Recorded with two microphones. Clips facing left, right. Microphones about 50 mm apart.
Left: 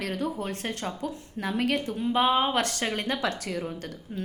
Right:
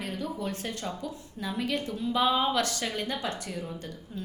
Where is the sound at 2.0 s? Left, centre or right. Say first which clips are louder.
Left 2 dB; left.